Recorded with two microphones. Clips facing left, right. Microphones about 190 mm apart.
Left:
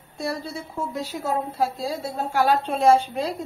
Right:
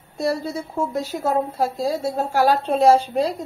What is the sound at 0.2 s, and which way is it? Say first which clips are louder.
A woman's voice: right 6 dB; 40° right (ahead or behind).